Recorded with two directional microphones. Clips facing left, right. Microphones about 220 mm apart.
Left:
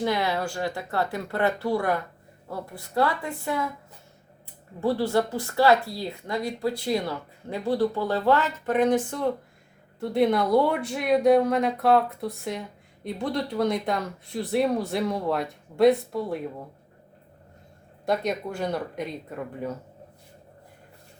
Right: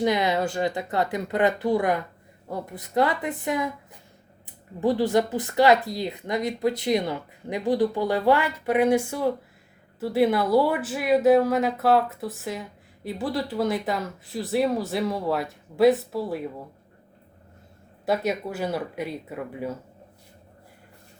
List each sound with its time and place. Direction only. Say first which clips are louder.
0.0 s speech: right 3 dB; 20° right (ahead or behind)
4.8 s speech: right 2 dB; 15° right (ahead or behind)
18.0 s speech: right 1 dB; 5° right (ahead or behind)